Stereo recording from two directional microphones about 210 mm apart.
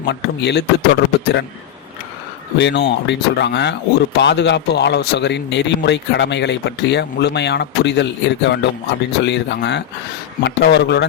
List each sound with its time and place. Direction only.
0.0 s a man's voice: 55° left (ahead or behind)
2.6 s a man's voice: 55° left (ahead or behind)